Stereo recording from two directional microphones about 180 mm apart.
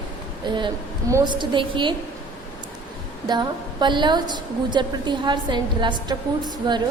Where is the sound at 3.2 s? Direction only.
25° right (ahead or behind).